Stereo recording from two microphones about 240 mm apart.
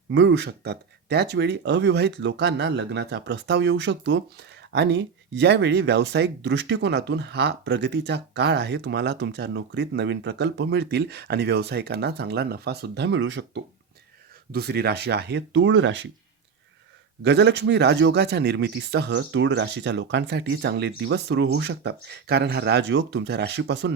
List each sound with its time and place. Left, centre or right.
0.1 s speech: right
17.2 s speech: right